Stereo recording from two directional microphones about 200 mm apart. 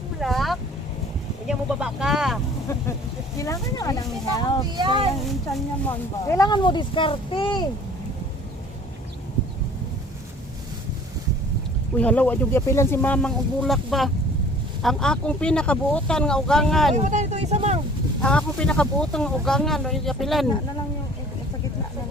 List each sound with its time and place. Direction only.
0.2 s vehicle: centre (ahead or behind)
3.3 s speech: 15° left (ahead or behind)
4.7 s speech: 25° right (ahead or behind)
6.2 s speech: 15° left (ahead or behind)
11.9 s speech: 5° left (ahead or behind)
16.9 s speech: 35° right (ahead or behind)
18.2 s speech: 5° left (ahead or behind)